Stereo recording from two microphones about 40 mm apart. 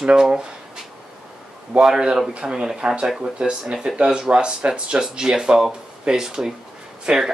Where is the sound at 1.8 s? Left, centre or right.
Centre.